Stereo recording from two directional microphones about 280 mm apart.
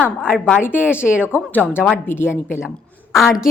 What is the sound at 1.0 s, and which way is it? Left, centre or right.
Speech, centre.